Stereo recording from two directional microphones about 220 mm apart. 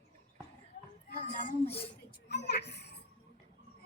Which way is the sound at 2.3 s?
50° left (ahead or behind).